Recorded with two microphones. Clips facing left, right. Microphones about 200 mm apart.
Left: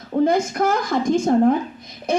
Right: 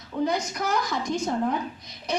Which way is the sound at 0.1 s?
50° left (ahead or behind).